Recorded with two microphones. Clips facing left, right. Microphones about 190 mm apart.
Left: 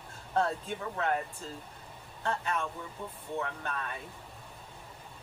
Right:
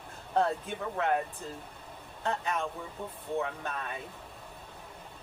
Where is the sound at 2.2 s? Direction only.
15° right (ahead or behind).